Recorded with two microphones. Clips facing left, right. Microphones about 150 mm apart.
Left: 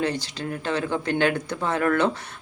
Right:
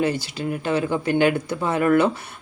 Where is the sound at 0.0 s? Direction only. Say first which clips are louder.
Right 3 dB; 10° right (ahead or behind).